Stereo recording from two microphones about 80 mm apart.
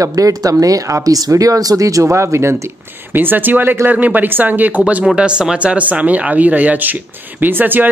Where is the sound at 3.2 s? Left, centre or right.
Right.